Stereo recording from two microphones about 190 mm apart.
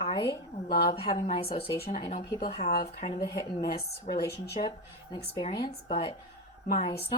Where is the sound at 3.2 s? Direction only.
25° left (ahead or behind).